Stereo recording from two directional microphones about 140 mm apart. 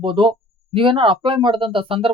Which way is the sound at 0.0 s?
35° right (ahead or behind).